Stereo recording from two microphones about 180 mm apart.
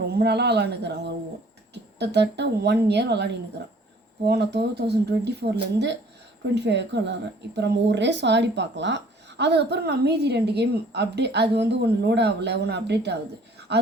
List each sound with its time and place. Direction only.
0.1 s a woman's voice: 65° right (ahead or behind)
4.3 s a woman's voice: 65° right (ahead or behind)
9.4 s a woman's voice: 70° right (ahead or behind)